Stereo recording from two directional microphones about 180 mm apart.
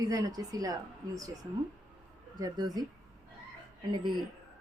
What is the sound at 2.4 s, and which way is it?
Speech, 20° right (ahead or behind).